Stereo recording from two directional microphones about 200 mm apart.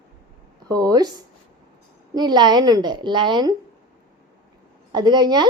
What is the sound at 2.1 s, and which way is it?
A woman's voice, 20° right (ahead or behind).